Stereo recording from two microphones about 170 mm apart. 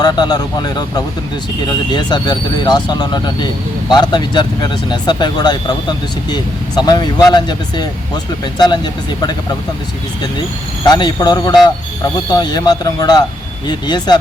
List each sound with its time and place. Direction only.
0.0 s speech: 25° left (ahead or behind)
10.8 s speech: 25° left (ahead or behind)